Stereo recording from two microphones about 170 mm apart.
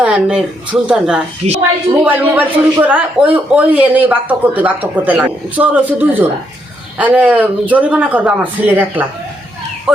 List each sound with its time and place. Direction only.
0.0 s speech: 5° right (ahead or behind)
1.4 s a woman's voice: 40° right (ahead or behind)
2.0 s a man's voice: 10° right (ahead or behind)